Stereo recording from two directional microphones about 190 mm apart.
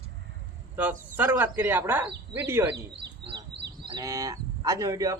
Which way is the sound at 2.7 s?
65° right (ahead or behind).